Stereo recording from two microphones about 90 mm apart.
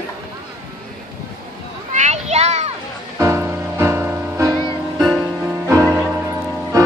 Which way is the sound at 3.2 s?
30° right (ahead or behind).